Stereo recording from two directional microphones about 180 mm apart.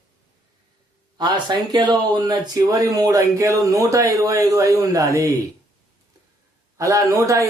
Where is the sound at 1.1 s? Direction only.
25° right (ahead or behind).